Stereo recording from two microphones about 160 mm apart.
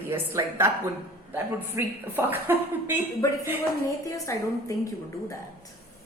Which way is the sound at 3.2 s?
20° left (ahead or behind).